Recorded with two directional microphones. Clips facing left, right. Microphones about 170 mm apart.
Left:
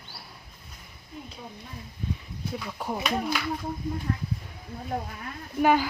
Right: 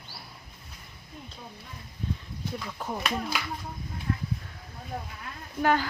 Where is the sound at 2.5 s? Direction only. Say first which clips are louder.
Left 3 dB; 10° left (ahead or behind).